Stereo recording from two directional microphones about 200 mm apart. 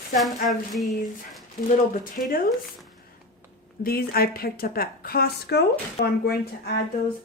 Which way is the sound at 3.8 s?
50° left (ahead or behind).